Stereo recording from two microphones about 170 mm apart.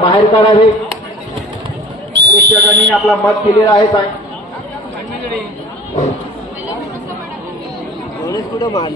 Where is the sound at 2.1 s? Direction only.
90° right.